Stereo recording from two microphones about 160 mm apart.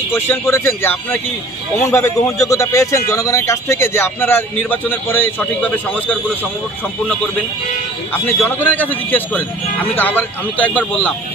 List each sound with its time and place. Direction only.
0.1 s a man's voice: 15° left (ahead or behind)
8.1 s a man's voice: 15° left (ahead or behind)